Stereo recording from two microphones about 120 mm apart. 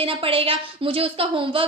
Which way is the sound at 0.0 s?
50° right (ahead or behind).